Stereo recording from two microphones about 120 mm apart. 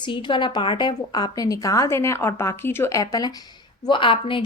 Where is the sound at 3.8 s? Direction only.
45° left (ahead or behind).